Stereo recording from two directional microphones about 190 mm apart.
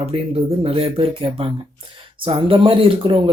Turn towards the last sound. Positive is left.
turn(degrees=-25)  # may be behind; listen again after turning